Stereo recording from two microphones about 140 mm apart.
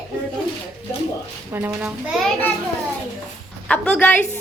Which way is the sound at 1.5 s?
15° right (ahead or behind).